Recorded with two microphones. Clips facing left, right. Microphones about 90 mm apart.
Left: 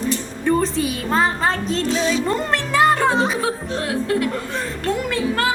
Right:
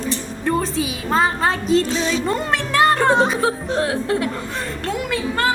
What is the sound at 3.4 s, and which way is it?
Speech, 30° right (ahead or behind).